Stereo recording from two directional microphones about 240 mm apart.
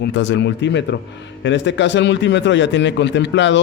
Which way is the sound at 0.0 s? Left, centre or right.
Left.